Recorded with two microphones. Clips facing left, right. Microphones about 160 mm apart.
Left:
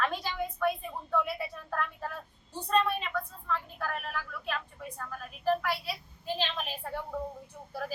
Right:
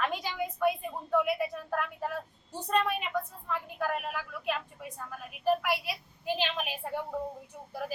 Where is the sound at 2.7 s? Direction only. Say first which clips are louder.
Left 1 dB; 15° right (ahead or behind).